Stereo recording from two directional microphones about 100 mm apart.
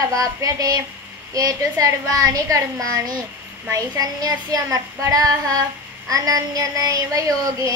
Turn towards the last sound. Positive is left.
turn(degrees=-35)  # may be behind; listen again after turning